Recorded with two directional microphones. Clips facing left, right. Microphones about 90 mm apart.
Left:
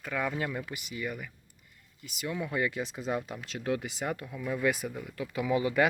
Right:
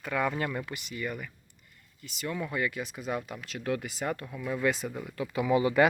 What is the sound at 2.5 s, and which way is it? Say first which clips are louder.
Speech: left 1 dB; 25° left (ahead or behind).